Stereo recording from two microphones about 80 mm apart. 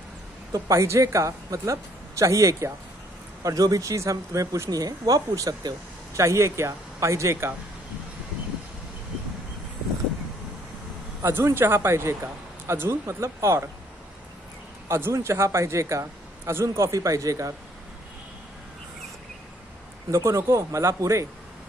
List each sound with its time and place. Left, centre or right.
0.5 s a man's voice: right
6.1 s a man's voice: right
11.2 s a man's voice: right
14.9 s a man's voice: right
20.1 s a man's voice: right